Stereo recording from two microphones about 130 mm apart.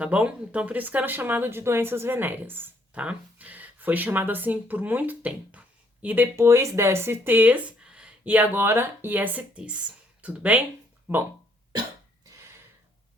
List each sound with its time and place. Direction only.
0.0 s speech: 10° right (ahead or behind)